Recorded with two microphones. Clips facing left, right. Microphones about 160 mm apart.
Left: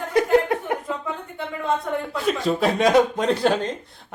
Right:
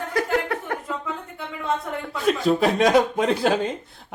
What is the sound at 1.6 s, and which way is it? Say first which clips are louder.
A man's voice: left 2 dB; centre (ahead or behind).